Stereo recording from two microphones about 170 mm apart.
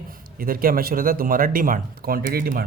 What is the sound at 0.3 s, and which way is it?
A man's voice, 55° right (ahead or behind).